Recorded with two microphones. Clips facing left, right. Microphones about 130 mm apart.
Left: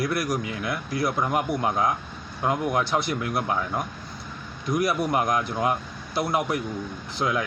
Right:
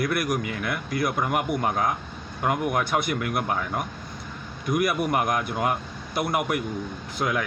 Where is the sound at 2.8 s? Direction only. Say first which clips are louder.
Even; 55° right (ahead or behind).